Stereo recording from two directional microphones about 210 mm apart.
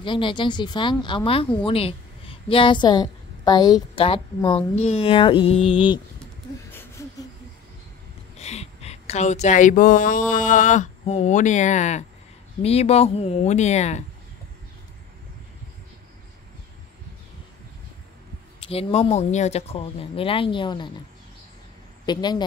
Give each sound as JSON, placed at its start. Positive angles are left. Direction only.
{"t": 0.0, "sound": "speech", "side_deg": 25}
{"t": 6.7, "sound": "a sound", "side_deg": 10}
{"t": 8.4, "sound": "speech", "side_deg": 30}
{"t": 18.6, "sound": "speech", "side_deg": 30}
{"t": 22.0, "sound": "a woman's voice", "side_deg": 20}